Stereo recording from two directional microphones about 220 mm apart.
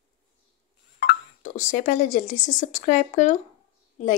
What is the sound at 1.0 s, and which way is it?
Speech, 35° left (ahead or behind).